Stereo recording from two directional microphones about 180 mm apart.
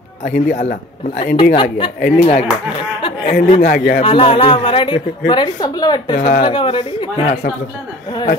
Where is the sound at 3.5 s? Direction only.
45° left (ahead or behind).